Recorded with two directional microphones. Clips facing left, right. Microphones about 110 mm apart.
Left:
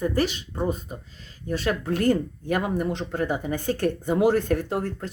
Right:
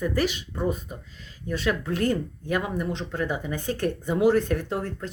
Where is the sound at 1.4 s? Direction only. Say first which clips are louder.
Left 1 dB; 40° left (ahead or behind).